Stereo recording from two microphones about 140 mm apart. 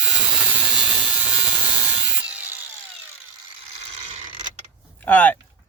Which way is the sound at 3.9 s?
55° right (ahead or behind).